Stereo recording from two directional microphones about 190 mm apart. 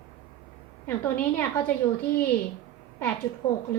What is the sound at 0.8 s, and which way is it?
Speech, 10° left (ahead or behind).